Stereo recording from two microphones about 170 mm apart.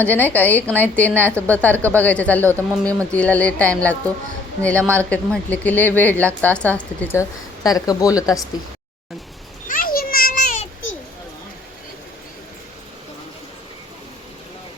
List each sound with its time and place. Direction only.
0.0 s a woman's voice: 10° left (ahead or behind)
4.8 s a woman's voice: 15° right (ahead or behind)
5.0 s a woman's voice: 10° left (ahead or behind)
9.6 s a sound: 55° left (ahead or behind)